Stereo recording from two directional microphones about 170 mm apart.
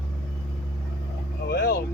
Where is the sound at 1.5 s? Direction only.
70° left (ahead or behind).